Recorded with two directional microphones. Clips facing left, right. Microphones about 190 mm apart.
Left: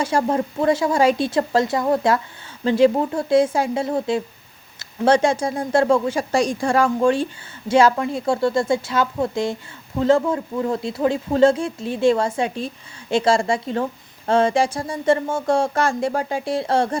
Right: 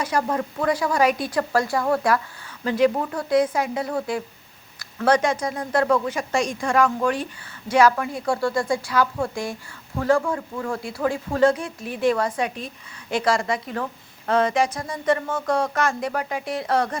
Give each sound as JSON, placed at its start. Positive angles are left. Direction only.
{"t": 0.0, "sound": "speech", "side_deg": 25}